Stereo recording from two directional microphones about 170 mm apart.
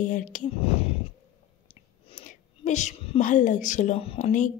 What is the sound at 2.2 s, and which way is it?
A woman's voice, 45° left (ahead or behind).